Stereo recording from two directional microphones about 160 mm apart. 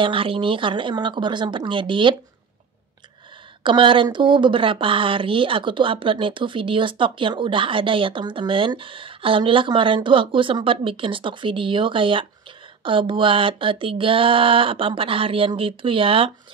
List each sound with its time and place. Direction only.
0.0 s a woman's voice: 35° right (ahead or behind)
3.6 s a woman's voice: 30° right (ahead or behind)